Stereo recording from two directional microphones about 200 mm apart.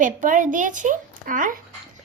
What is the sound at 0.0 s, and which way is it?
Speech, 40° right (ahead or behind).